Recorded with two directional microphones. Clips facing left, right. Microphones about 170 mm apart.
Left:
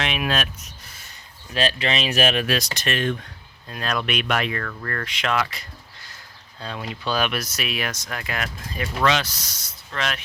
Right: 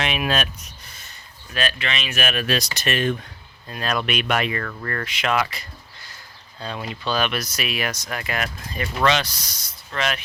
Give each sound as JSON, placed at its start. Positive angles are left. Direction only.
{"t": 0.0, "sound": "speech", "side_deg": 0}
{"t": 0.9, "sound": "a sound", "side_deg": 5}
{"t": 1.5, "sound": "speech", "side_deg": 30}
{"t": 2.7, "sound": "speech", "side_deg": -5}